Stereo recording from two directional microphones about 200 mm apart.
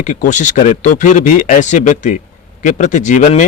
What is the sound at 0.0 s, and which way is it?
Speech, 40° left (ahead or behind).